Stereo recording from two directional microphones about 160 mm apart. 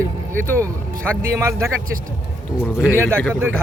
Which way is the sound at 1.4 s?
15° right (ahead or behind).